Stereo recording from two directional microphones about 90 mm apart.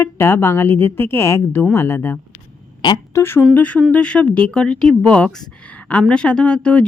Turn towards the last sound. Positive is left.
turn(degrees=10)  # may be behind; listen again after turning